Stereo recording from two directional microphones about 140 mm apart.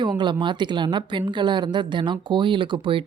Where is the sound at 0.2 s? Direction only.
35° right (ahead or behind).